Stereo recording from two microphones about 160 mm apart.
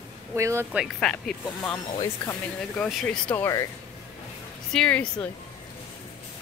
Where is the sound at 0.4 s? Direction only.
20° right (ahead or behind).